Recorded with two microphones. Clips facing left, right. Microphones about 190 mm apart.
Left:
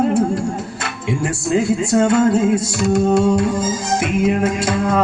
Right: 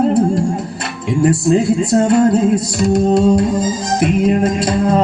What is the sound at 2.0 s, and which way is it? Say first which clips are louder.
Music: right 1 dB; 35° right (ahead or behind).